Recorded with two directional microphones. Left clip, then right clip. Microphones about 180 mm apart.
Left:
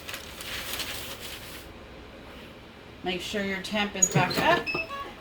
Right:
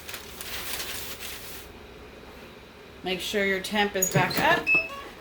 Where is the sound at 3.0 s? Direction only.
40° right (ahead or behind).